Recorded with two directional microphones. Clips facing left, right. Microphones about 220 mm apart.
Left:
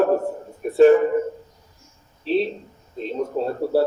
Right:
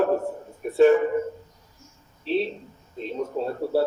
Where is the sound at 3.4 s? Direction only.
35° left (ahead or behind).